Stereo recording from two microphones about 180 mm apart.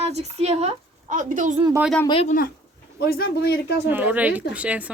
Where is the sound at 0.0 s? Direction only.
35° right (ahead or behind).